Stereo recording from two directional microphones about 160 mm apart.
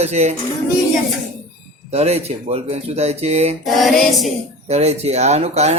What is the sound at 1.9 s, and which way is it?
Speech, 40° right (ahead or behind).